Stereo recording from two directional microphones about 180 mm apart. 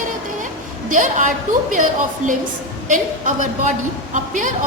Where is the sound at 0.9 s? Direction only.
45° right (ahead or behind).